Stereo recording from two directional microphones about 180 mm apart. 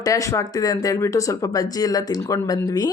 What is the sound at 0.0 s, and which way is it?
A woman's voice, 20° left (ahead or behind).